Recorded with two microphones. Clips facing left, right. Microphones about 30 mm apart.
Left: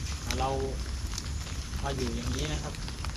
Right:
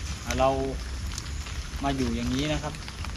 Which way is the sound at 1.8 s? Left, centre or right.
Right.